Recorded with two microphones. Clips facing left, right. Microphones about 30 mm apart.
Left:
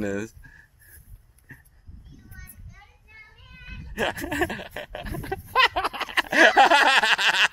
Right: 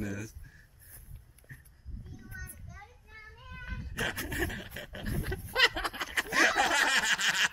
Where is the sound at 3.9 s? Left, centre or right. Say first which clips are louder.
Left 8 dB; left.